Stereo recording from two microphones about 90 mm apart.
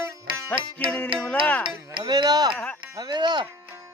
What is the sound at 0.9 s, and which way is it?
Speech, 15° left (ahead or behind).